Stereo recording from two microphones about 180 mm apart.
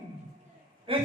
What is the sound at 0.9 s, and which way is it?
Speech, 30° right (ahead or behind).